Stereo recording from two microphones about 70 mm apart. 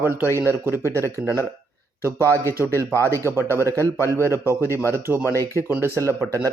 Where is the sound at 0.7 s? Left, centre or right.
Left.